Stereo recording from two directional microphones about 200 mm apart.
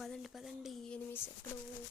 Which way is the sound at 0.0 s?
Centre (ahead or behind).